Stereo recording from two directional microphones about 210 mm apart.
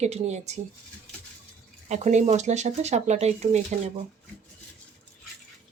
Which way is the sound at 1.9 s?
35° right (ahead or behind).